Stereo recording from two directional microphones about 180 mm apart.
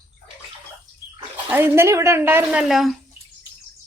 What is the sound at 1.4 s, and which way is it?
Speech, 10° right (ahead or behind).